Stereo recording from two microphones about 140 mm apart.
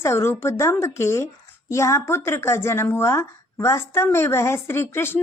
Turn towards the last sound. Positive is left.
turn(degrees=15)  # may be behind; listen again after turning